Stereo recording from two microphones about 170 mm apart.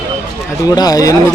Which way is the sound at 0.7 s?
20° left (ahead or behind).